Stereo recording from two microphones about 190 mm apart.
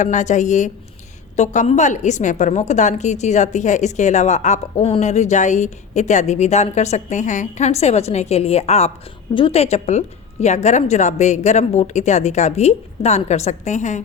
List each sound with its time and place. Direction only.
0.0 s a woman's voice: 40° left (ahead or behind)